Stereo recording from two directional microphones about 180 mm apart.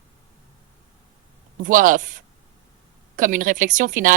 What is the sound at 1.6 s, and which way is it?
Speech, 50° right (ahead or behind).